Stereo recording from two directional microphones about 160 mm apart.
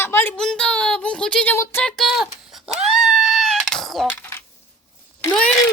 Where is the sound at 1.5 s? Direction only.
15° left (ahead or behind).